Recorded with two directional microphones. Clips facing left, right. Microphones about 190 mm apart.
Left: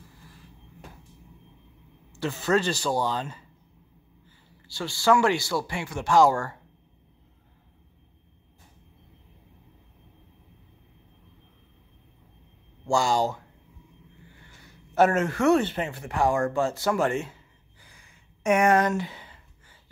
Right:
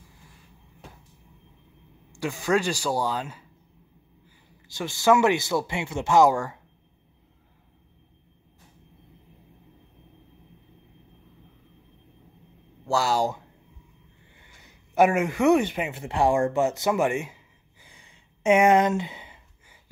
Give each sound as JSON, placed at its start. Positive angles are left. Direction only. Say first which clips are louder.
{"t": 2.1, "sound": "speech", "louder": "even", "side_deg": -10}
{"t": 4.6, "sound": "speech", "louder": "right 2 dB", "side_deg": -20}
{"t": 12.8, "sound": "speech", "louder": "even", "side_deg": -5}
{"t": 14.3, "sound": "a sound", "louder": "left 3 dB", "side_deg": -20}
{"t": 15.9, "sound": "speech", "louder": "right 4 dB", "side_deg": -25}
{"t": 17.8, "sound": "a sound", "louder": "right 2 dB", "side_deg": -25}